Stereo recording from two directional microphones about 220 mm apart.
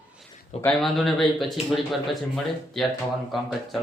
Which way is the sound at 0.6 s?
5° left (ahead or behind).